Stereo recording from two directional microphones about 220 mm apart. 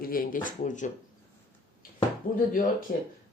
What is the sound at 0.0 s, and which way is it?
Speech, 40° left (ahead or behind).